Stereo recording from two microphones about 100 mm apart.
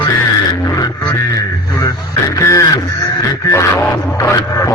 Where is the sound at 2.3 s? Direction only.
30° left (ahead or behind).